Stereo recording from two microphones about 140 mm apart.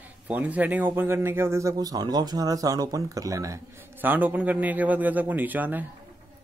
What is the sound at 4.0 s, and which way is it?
A man's voice, 15° right (ahead or behind).